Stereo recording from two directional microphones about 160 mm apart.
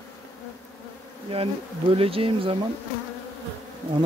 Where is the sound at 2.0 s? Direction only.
35° right (ahead or behind).